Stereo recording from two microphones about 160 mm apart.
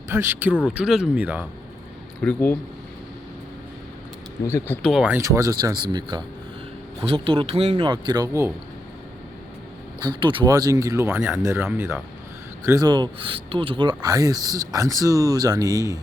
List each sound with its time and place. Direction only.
0.1 s speech: 15° right (ahead or behind)
2.2 s speech: 10° left (ahead or behind)
4.4 s speech: 15° left (ahead or behind)
4.8 s speech: centre (ahead or behind)
5.1 s a man's voice: 20° right (ahead or behind)
10.0 s speech: 30° right (ahead or behind)